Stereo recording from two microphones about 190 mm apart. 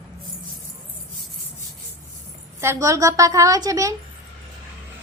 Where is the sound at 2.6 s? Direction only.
15° right (ahead or behind).